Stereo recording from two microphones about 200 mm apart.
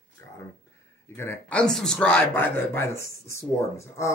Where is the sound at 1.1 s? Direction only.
10° left (ahead or behind).